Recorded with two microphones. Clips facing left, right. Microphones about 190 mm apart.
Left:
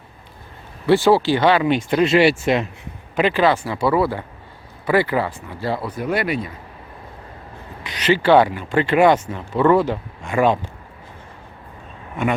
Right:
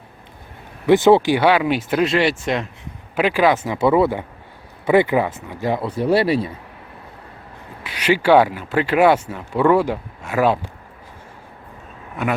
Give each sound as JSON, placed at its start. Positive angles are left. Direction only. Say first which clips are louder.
{"t": 0.9, "sound": "speech", "louder": "right 2 dB", "side_deg": -20}
{"t": 3.2, "sound": "speech", "louder": "even", "side_deg": -10}
{"t": 3.6, "sound": "speech", "louder": "right 3 dB", "side_deg": -20}
{"t": 5.9, "sound": "speech", "louder": "right 9 dB", "side_deg": -30}
{"t": 7.9, "sound": "speech", "louder": "even", "side_deg": -10}